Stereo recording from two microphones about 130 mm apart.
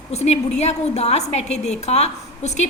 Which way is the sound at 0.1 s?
55° left (ahead or behind).